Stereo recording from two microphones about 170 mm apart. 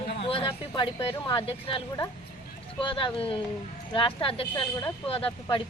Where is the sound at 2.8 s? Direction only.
30° left (ahead or behind).